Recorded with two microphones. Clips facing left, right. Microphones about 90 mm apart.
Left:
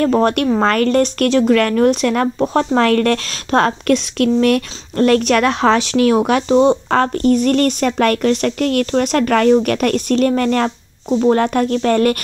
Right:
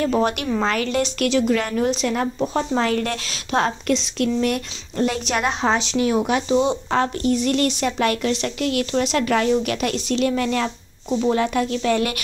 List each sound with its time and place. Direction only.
0.0 s a woman's voice: 50° left (ahead or behind)
1.5 s a woman's voice: 60° left (ahead or behind)